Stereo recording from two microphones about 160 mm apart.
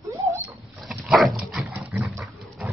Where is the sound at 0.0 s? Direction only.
20° right (ahead or behind).